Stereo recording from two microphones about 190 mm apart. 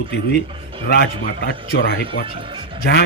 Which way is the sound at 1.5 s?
55° left (ahead or behind).